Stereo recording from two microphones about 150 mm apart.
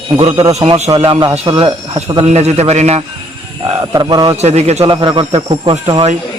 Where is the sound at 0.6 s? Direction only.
45° right (ahead or behind); by 1.7 s 30° right (ahead or behind).